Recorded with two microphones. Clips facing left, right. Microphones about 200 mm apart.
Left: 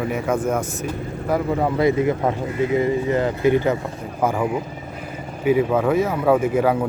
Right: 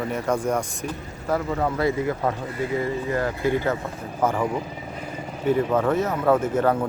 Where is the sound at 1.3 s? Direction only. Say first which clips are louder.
Left 3 dB; 15° left (ahead or behind).